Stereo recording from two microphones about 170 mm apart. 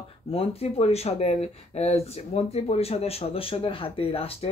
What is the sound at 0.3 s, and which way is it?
Speech, 35° left (ahead or behind).